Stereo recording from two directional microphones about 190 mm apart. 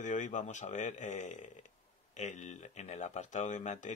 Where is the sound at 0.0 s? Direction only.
40° left (ahead or behind).